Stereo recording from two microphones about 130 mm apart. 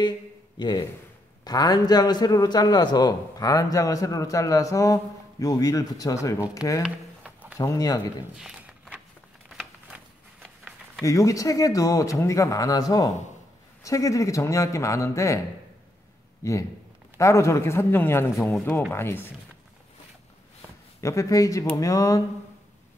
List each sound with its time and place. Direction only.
0.6 s a man's voice: 35° left (ahead or behind)
6.8 s a sound: 5° right (ahead or behind)
7.5 s a man's voice: 25° left (ahead or behind)
8.4 s a sound: 5° right (ahead or behind)
11.0 s a man's voice: 25° left (ahead or behind)
18.4 s speech: centre (ahead or behind)
18.9 s speech: 15° left (ahead or behind)
21.0 s a man's voice: 25° left (ahead or behind)